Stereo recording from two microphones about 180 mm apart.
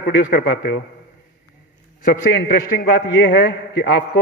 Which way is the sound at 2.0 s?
55° left (ahead or behind).